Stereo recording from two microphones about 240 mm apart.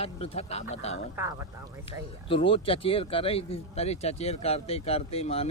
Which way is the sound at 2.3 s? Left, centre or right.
Left.